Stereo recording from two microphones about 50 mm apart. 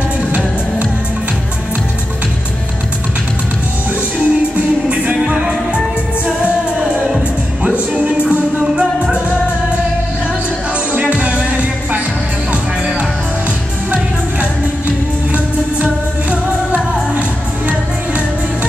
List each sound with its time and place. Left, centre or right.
0.3 s music: right
4.3 s music: right
6.8 s music: centre
10.9 s music: right
13.9 s music: right